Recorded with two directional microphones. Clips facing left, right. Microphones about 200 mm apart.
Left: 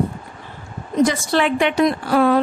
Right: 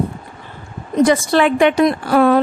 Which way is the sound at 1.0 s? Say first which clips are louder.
Right 5 dB; 55° right (ahead or behind).